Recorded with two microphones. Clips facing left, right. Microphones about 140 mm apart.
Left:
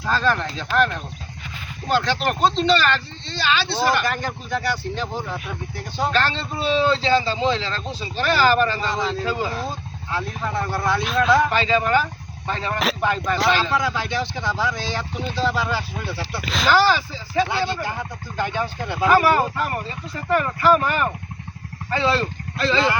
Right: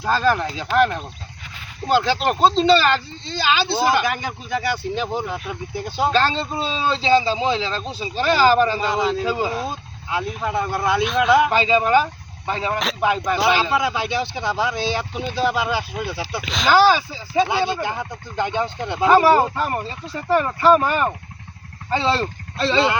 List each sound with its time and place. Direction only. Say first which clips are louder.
0.1 s speech: right 2 dB; 5° right (ahead or behind)
1.9 s speech: right 3 dB; 20° right (ahead or behind)
16.4 s speech: left 1 dB; 5° left (ahead or behind)
16.6 s speech: right 3 dB; 15° right (ahead or behind)